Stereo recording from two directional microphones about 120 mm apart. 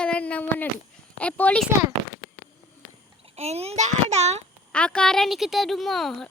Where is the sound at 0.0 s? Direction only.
10° left (ahead or behind).